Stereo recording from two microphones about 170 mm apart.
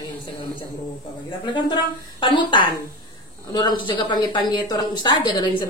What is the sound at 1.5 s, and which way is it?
A woman's voice, 30° left (ahead or behind).